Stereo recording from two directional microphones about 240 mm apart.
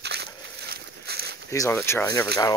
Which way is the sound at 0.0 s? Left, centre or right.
Right.